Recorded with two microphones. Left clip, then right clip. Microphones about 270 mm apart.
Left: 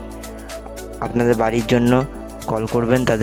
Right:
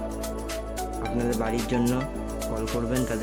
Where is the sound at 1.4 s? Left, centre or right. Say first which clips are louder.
Left 9 dB; left.